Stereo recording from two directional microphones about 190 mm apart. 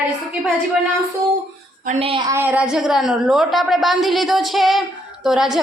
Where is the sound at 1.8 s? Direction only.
30° right (ahead or behind).